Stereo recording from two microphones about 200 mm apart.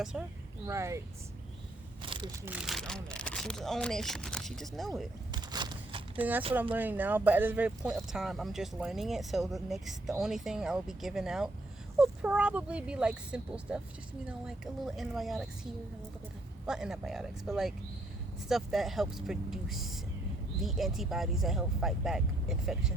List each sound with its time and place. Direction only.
0.0 s speech: 5° right (ahead or behind)
0.7 s speech: 15° right (ahead or behind)
2.0 s a sound: 25° right (ahead or behind)
2.4 s speech: 5° right (ahead or behind)
5.3 s a sound: 20° right (ahead or behind)
6.1 s speech: 10° right (ahead or behind)
16.6 s speech: 5° right (ahead or behind)